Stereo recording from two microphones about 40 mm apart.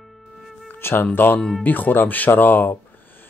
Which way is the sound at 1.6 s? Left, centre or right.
Left.